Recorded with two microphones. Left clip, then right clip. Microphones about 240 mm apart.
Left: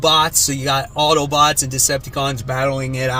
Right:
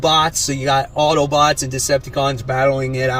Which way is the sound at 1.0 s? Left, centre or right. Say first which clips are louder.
Left 2 dB; left.